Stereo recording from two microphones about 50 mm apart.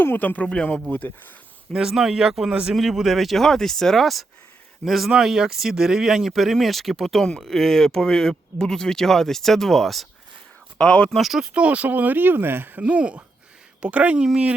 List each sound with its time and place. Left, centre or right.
0.0 s speech: left
0.4 s a man's voice: left
1.7 s speech: centre
2.5 s speech: right
2.7 s speech: centre
10.8 s speech: centre
11.1 s speech: centre
11.5 s speech: right
12.8 s speech: right